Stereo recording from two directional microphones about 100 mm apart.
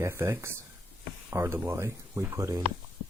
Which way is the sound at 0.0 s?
25° right (ahead or behind).